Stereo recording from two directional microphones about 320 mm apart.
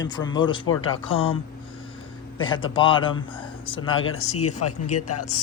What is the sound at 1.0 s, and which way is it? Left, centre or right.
Speech, centre.